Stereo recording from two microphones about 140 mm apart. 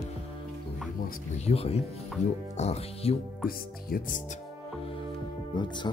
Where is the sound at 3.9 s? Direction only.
75° left (ahead or behind).